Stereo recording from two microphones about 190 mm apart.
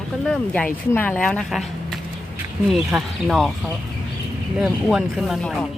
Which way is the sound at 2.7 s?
Centre (ahead or behind).